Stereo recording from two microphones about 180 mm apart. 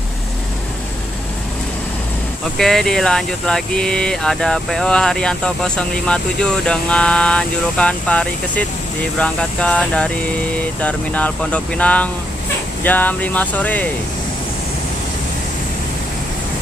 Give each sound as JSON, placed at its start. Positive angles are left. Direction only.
{"t": 2.5, "sound": "speech", "side_deg": 0}